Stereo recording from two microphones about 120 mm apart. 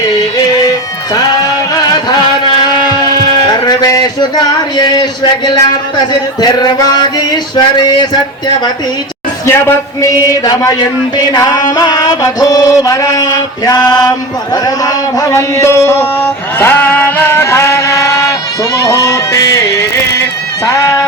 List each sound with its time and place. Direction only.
2.6 s a sound: 40° left (ahead or behind)
4.8 s music: 35° left (ahead or behind)
9.5 s a man's voice: 25° left (ahead or behind)
11.3 s mantra: 30° left (ahead or behind)
18.8 s music: 25° left (ahead or behind)
20.7 s a sound: 30° left (ahead or behind)